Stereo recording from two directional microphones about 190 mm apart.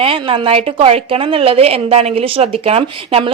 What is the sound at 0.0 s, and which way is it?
A woman's voice, 30° right (ahead or behind).